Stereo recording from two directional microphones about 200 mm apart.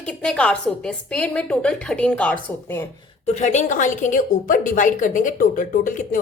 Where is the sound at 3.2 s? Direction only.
35° left (ahead or behind).